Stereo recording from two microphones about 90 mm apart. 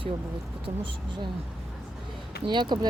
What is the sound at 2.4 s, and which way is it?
Speech, 60° right (ahead or behind).